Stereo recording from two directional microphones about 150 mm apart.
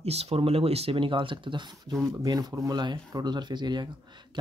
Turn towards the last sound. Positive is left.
turn(degrees=-30)  # may be behind; listen again after turning